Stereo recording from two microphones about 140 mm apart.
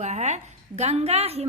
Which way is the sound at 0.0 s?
55° right (ahead or behind).